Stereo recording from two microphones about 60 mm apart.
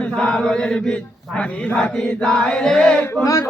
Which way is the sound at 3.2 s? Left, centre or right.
Left.